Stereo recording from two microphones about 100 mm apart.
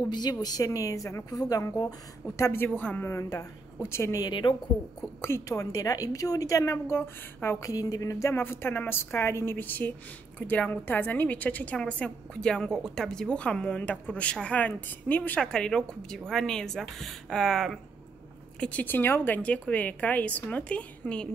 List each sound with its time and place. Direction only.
0.0 s a woman's voice: 45° left (ahead or behind)
4.2 s a woman's voice: 50° left (ahead or behind)
5.2 s a woman's voice: 25° left (ahead or behind); by 17.7 s 5° left (ahead or behind)
18.6 s a woman's voice: 15° left (ahead or behind)